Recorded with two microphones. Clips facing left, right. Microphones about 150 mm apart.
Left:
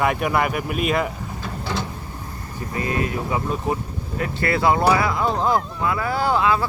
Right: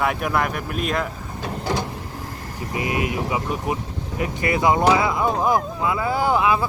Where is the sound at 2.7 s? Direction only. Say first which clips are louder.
Even; 15° right (ahead or behind).